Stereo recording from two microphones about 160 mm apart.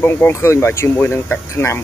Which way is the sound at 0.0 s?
15° left (ahead or behind).